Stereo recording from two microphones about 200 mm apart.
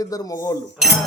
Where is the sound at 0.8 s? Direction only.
Centre (ahead or behind).